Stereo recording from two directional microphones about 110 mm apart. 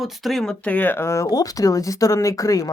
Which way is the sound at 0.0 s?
Centre (ahead or behind).